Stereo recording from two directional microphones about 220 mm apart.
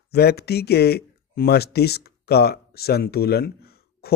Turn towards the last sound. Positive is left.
turn(degrees=45)  # may be behind; listen again after turning